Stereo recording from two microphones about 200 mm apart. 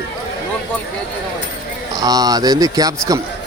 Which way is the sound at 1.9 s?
20° right (ahead or behind).